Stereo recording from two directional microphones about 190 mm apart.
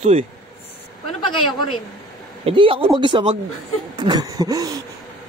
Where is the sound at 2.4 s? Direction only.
30° right (ahead or behind).